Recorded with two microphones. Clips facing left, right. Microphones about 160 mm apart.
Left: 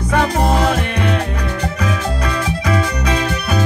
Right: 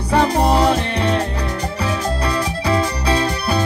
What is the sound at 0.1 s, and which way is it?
Music, 30° right (ahead or behind).